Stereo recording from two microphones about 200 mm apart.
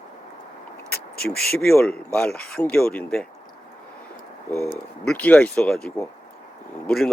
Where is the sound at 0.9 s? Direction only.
50° left (ahead or behind).